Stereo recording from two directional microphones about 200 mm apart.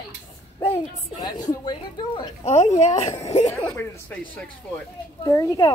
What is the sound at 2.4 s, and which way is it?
Speech, 35° left (ahead or behind).